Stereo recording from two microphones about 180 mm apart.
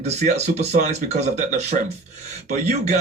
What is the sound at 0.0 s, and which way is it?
Speech, 40° right (ahead or behind).